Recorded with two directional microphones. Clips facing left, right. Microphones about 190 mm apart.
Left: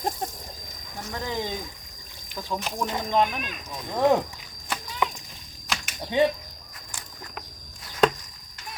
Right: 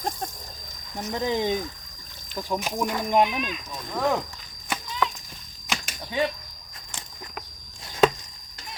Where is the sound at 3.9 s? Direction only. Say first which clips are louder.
Left 4 dB; 20° left (ahead or behind).